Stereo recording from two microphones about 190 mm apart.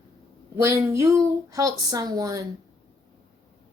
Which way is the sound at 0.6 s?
15° right (ahead or behind).